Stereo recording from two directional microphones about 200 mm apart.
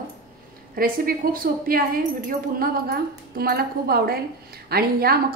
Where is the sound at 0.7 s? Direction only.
45° right (ahead or behind).